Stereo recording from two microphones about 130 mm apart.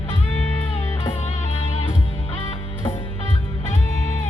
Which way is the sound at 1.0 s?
50° left (ahead or behind).